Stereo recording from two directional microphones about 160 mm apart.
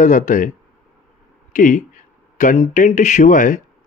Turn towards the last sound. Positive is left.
turn(degrees=55)  # may be behind; listen again after turning